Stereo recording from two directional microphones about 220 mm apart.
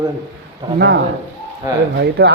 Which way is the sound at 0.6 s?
25° right (ahead or behind).